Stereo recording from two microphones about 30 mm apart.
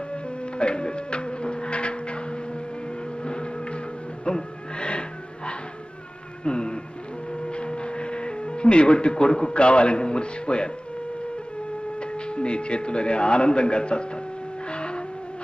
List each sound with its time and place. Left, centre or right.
0.1 s music: left
3.2 s a sound: left
4.3 s music: left
6.4 s insect: left
7.4 s speech: left
11.9 s speech: left
14.7 s vehicle: left